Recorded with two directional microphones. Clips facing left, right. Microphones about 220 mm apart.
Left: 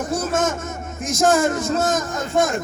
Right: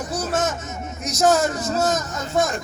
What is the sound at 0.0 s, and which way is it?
Speech, 50° left (ahead or behind).